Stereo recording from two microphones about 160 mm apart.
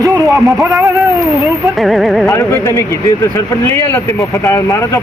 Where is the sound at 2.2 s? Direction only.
20° left (ahead or behind).